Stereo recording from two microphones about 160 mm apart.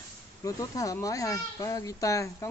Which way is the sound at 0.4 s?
20° left (ahead or behind).